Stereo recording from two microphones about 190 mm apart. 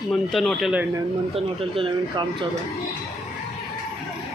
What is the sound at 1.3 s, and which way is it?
Speech, 30° right (ahead or behind).